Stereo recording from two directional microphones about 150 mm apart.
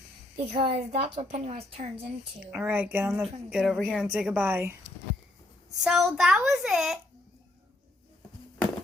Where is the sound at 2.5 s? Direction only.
10° right (ahead or behind).